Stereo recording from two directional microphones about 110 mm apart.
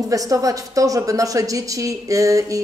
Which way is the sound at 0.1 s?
30° right (ahead or behind).